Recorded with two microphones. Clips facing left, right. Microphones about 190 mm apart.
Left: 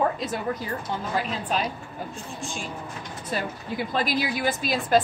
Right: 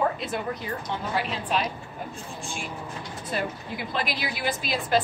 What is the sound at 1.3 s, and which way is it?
Speech, 40° left (ahead or behind).